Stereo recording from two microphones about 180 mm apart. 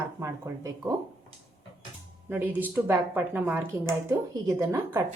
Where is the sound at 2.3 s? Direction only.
10° right (ahead or behind).